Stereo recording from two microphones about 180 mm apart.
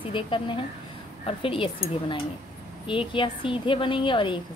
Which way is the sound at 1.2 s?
30° left (ahead or behind).